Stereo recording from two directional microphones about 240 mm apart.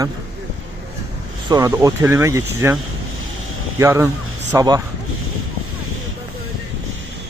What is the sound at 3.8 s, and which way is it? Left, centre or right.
Speech, centre.